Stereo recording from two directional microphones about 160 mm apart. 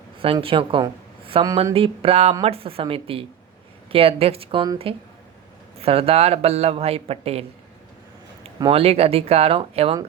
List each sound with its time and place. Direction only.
0.3 s speech: 30° right (ahead or behind)
8.5 s speech: 30° right (ahead or behind)